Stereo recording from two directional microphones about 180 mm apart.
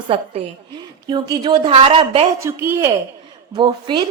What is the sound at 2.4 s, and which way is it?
Speech, 15° right (ahead or behind).